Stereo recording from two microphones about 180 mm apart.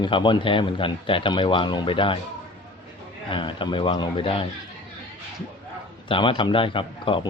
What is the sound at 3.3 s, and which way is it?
A man's voice, 25° left (ahead or behind).